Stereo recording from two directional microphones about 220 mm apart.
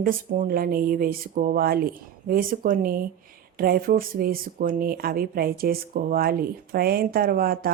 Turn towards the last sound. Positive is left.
turn(degrees=-40)  # may be behind; listen again after turning